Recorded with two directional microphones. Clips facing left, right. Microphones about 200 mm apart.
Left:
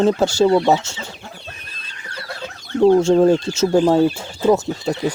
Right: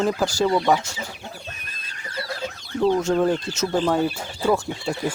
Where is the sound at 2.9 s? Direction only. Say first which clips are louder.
Left 7 dB; 30° left (ahead or behind).